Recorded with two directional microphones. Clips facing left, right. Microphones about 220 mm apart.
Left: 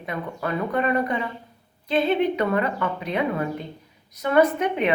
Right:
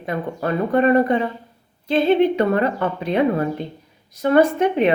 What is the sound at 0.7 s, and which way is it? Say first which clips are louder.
Speech: right 9 dB; 30° right (ahead or behind).